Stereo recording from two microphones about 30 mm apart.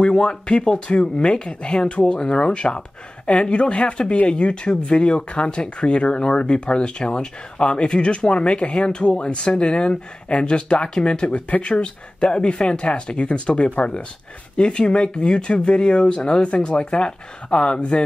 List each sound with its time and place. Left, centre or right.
0.0 s speech: left